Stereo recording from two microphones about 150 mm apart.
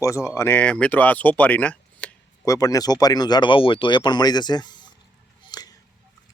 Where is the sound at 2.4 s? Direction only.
25° left (ahead or behind).